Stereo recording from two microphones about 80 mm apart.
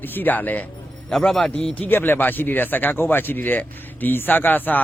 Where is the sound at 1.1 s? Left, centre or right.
Centre.